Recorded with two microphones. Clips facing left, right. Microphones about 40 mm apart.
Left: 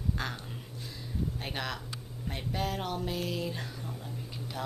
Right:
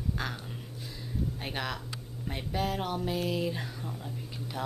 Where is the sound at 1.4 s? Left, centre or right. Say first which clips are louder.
Right 1 dB; centre.